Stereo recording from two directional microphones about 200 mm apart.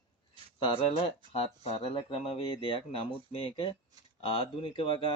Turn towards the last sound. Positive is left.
turn(degrees=25)  # may be behind; listen again after turning